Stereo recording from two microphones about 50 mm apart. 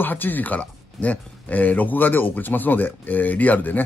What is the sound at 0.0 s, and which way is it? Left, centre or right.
Speech, left.